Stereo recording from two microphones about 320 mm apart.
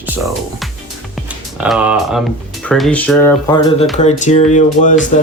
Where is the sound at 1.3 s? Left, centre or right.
Centre; by 5.0 s left.